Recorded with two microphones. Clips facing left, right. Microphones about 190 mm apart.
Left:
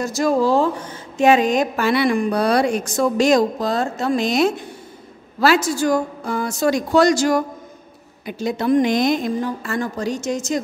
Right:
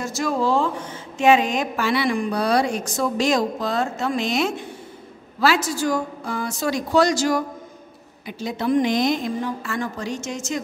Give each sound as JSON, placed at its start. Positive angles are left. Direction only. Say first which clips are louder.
{"t": 0.0, "sound": "a woman's voice", "louder": "left 5 dB", "side_deg": 40}